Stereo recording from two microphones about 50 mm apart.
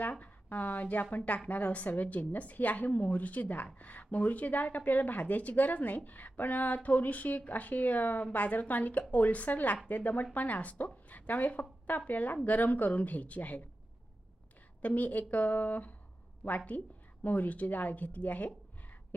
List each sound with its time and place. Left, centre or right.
0.0 s a woman's voice: left
14.8 s speech: left